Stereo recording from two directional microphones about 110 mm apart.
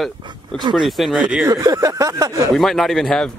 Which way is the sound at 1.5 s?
30° right (ahead or behind).